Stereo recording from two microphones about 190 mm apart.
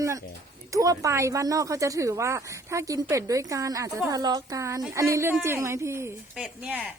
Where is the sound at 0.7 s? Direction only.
20° right (ahead or behind).